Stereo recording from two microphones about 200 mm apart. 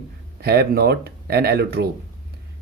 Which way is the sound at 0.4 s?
50° right (ahead or behind).